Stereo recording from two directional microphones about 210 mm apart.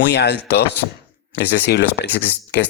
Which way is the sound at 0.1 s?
55° left (ahead or behind).